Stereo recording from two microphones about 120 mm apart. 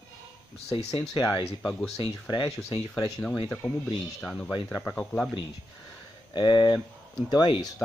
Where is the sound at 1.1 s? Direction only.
35° left (ahead or behind).